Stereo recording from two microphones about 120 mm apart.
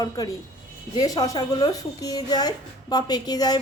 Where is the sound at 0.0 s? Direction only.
30° left (ahead or behind).